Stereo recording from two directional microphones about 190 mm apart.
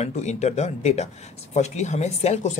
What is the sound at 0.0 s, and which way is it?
Speech, 35° left (ahead or behind).